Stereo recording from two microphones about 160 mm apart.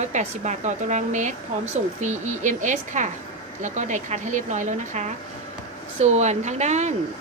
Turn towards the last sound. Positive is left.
turn(degrees=-45)  # may be behind; listen again after turning